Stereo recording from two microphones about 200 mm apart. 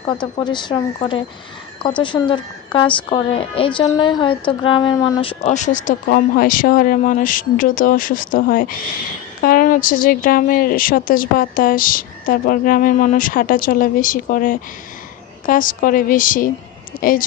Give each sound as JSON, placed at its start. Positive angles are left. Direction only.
{"t": 0.4, "sound": "a woman's voice", "side_deg": 20}
{"t": 16.9, "sound": "a woman's voice", "side_deg": 20}